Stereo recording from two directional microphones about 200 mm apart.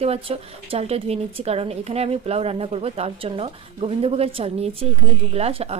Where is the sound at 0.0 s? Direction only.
30° right (ahead or behind).